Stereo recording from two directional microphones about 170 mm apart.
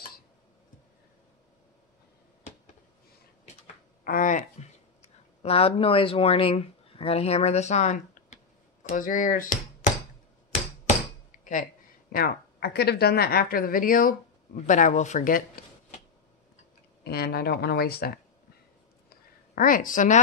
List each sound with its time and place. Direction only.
4.0 s a sound: 55° left (ahead or behind)
5.4 s speech: 35° left (ahead or behind); by 9.9 s 50° left (ahead or behind)
10.9 s hammer: 50° left (ahead or behind)
12.1 s speech: 65° left (ahead or behind)
17.0 s speech: 65° left (ahead or behind)
19.0 s a sound: 55° left (ahead or behind)